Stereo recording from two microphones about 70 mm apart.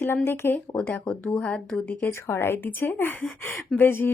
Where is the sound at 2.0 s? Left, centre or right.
Left.